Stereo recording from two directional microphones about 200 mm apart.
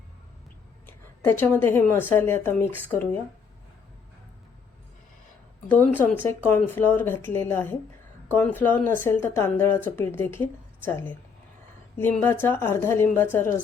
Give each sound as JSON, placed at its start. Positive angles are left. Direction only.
{"t": 0.9, "sound": "a sound", "side_deg": 10}
{"t": 2.0, "sound": "speech", "side_deg": 10}
{"t": 5.6, "sound": "a woman's voice", "side_deg": 5}